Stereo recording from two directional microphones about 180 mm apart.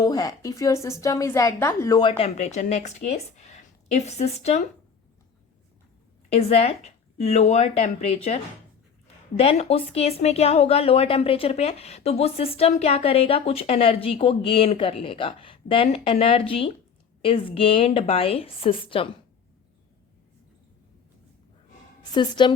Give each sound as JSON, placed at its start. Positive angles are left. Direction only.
{"t": 0.0, "sound": "a woman's voice", "side_deg": 20}
{"t": 6.3, "sound": "speech", "side_deg": 35}
{"t": 9.4, "sound": "speech", "side_deg": 35}
{"t": 22.1, "sound": "a woman's voice", "side_deg": 25}